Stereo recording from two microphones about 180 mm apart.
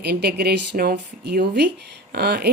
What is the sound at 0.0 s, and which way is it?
A woman's voice, 65° right (ahead or behind).